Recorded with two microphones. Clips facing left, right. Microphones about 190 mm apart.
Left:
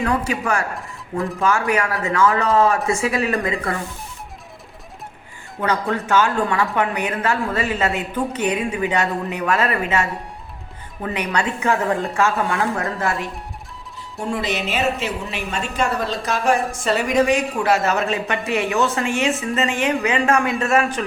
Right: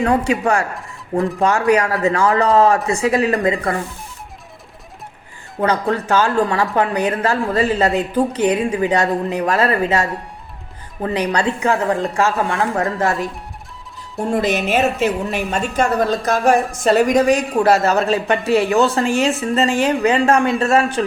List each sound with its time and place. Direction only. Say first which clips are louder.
0.0 s speech: right 5 dB; 30° right (ahead or behind)
5.5 s speech: right 4 dB; 35° right (ahead or behind)
14.3 s a woman's voice: right 6 dB; 45° right (ahead or behind); by 21.0 s 30° right (ahead or behind)